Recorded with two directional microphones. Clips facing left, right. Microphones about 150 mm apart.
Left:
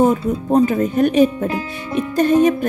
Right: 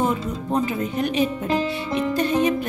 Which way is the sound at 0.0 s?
40° left (ahead or behind).